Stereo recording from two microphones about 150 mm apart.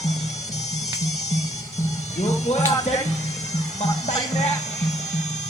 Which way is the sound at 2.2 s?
45° left (ahead or behind).